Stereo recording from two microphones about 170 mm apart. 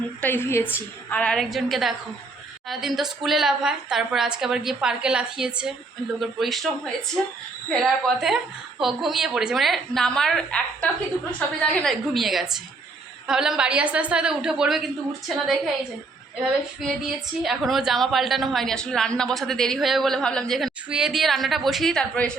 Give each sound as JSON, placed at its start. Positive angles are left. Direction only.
{"t": 0.2, "sound": "a woman's voice", "side_deg": 10}
{"t": 7.7, "sound": "a woman's voice", "side_deg": 0}
{"t": 17.4, "sound": "a woman's voice", "side_deg": 0}